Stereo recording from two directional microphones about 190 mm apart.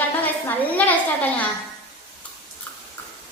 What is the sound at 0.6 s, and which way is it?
Speech, 10° left (ahead or behind).